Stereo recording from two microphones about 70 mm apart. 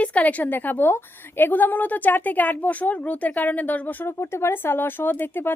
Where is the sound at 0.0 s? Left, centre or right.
Left.